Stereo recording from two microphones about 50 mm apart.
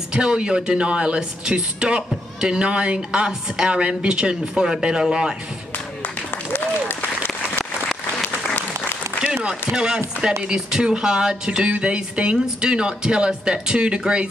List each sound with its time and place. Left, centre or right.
0.1 s speech: centre
6.0 s applause: left
9.2 s speech: centre